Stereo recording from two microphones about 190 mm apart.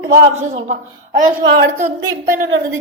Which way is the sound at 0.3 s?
40° right (ahead or behind).